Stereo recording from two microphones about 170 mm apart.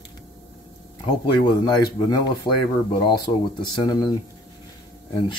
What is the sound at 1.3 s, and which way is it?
Speech, 25° left (ahead or behind).